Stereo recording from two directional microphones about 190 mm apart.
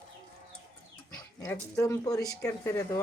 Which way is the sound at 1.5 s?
15° left (ahead or behind).